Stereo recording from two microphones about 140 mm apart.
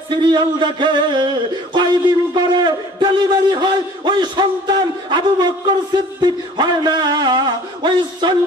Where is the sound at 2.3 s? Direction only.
30° right (ahead or behind).